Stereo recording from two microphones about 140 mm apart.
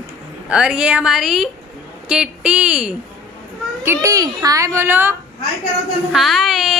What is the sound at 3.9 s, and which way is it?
A child's voice, 20° right (ahead or behind).